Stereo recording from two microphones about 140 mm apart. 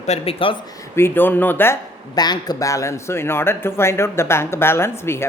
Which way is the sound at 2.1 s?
30° left (ahead or behind).